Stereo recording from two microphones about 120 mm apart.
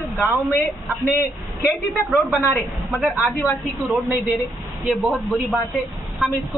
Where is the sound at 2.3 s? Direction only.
15° left (ahead or behind).